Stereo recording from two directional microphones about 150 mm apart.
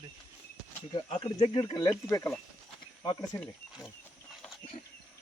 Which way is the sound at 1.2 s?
35° left (ahead or behind).